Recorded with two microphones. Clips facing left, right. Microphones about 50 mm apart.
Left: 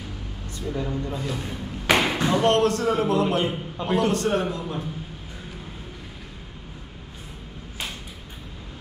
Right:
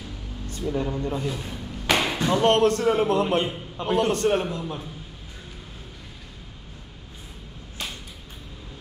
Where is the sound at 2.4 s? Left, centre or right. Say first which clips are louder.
Right 2 dB; right.